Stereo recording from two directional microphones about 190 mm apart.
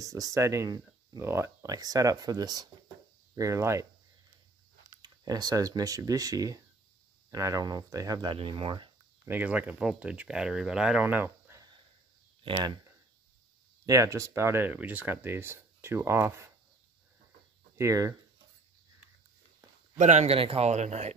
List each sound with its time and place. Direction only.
0.0 s speech: 15° right (ahead or behind)
5.0 s speech: 20° right (ahead or behind)
9.2 s speech: 10° right (ahead or behind)
13.8 s speech: 15° right (ahead or behind)
17.7 s speech: 15° right (ahead or behind)
20.0 s speech: 40° right (ahead or behind)